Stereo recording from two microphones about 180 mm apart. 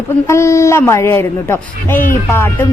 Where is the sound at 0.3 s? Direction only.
15° left (ahead or behind).